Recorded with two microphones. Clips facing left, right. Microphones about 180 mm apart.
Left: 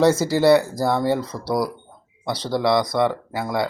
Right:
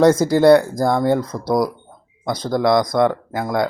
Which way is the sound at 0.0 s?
5° left (ahead or behind).